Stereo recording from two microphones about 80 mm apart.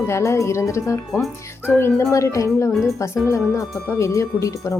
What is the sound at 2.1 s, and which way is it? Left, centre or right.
A woman's voice, left.